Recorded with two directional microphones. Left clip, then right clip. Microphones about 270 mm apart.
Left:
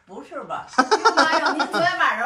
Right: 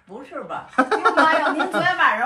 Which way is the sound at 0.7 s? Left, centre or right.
Centre.